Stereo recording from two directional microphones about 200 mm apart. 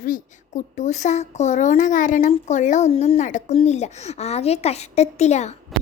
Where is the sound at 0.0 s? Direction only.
40° left (ahead or behind).